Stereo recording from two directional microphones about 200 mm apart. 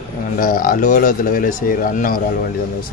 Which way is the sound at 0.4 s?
45° left (ahead or behind).